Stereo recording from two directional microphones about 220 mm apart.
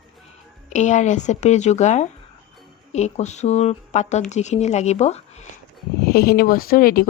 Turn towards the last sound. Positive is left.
turn(degrees=40)  # may be behind; listen again after turning